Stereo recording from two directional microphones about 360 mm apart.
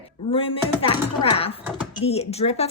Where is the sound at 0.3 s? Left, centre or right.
Centre.